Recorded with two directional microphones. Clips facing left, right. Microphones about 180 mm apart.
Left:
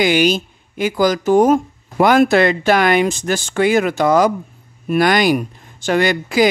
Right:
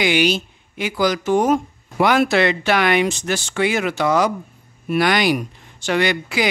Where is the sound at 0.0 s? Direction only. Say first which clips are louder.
Left 3 dB; 45° left (ahead or behind).